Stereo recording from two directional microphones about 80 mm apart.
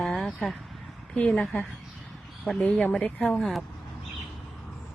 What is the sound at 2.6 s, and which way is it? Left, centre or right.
Speech, centre.